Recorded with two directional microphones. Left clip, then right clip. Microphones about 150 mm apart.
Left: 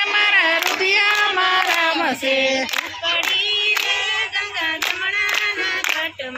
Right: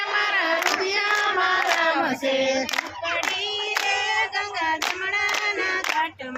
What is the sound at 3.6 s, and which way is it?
Singing, 55° right (ahead or behind).